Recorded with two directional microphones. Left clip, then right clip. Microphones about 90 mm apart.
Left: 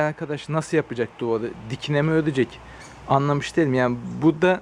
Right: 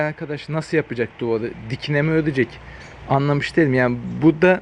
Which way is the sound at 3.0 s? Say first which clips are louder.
Right 1 dB; 15° left (ahead or behind).